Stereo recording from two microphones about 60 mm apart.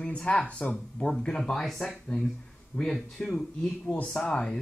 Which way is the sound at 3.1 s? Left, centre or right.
Centre.